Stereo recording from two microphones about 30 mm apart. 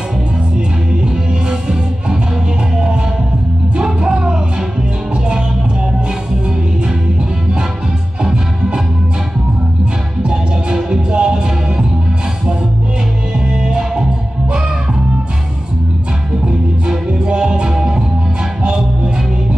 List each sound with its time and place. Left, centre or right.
1.0 s music: right
3.8 s music: right
8.2 s music: right
10.2 s music: right
13.6 s music: right
16.4 s music: right